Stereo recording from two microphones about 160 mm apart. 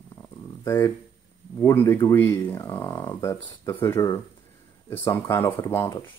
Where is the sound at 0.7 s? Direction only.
15° left (ahead or behind).